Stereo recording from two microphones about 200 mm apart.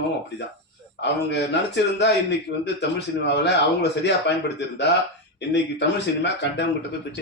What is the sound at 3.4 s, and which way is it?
Speech, 60° left (ahead or behind).